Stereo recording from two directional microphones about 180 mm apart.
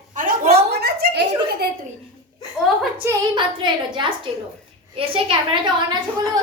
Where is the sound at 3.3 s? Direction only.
25° right (ahead or behind).